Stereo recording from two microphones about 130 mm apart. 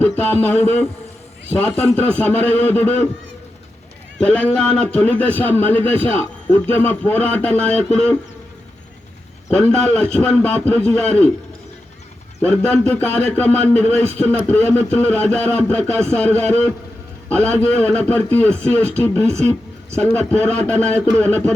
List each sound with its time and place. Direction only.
0.0 s a sound: 15° left (ahead or behind)
0.4 s a man's voice: 15° left (ahead or behind)
4.2 s a man's voice: 10° left (ahead or behind)
6.1 s a man's voice: 45° right (ahead or behind)
6.7 s a man's voice: 15° left (ahead or behind)
9.6 s a man's voice: 10° left (ahead or behind)
12.4 s a man's voice: 10° left (ahead or behind)